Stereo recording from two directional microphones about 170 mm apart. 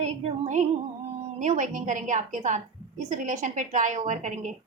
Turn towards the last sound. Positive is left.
turn(degrees=-45)  # may be behind; listen again after turning